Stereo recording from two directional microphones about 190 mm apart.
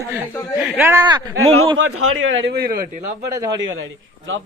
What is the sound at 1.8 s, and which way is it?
Speech, 90° right.